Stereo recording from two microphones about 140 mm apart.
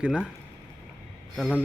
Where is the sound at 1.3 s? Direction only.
5° left (ahead or behind).